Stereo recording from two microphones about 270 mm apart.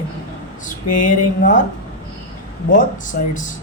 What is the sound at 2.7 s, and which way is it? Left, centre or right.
Speech, left.